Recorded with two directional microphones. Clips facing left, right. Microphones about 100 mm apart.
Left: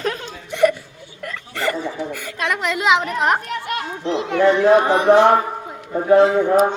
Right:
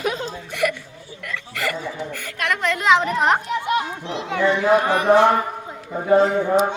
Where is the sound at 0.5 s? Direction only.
30° left (ahead or behind).